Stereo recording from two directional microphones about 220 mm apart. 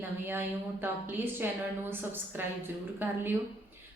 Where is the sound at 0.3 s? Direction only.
10° right (ahead or behind).